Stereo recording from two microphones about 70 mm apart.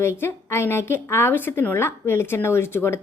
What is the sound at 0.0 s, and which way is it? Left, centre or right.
A woman's voice, left.